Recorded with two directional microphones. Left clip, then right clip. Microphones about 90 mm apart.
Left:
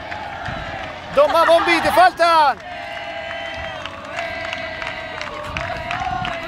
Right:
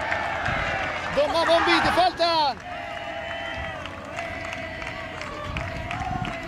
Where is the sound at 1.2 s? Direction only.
35° left (ahead or behind).